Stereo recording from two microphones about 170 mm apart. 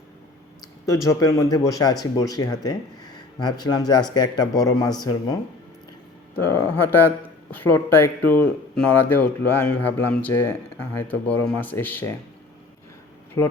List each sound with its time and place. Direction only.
1.0 s speech: 20° left (ahead or behind)